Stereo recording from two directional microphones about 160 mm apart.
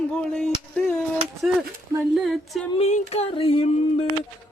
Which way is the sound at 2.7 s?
40° left (ahead or behind).